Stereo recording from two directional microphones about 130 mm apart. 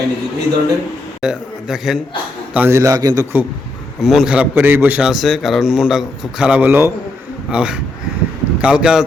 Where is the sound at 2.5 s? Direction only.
20° right (ahead or behind).